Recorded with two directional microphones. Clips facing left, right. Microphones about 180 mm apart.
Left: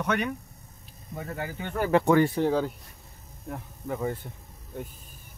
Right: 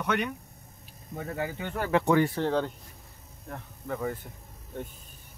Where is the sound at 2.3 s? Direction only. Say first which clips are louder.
Left 3 dB; 10° left (ahead or behind).